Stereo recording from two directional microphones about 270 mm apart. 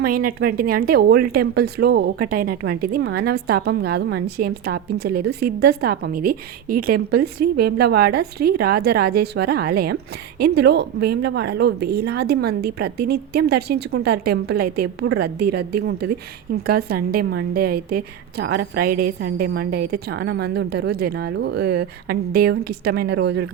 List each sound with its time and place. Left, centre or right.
0.0 s a woman's voice: right